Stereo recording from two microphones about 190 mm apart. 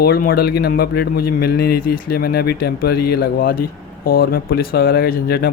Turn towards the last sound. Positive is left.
turn(degrees=55)  # may be behind; listen again after turning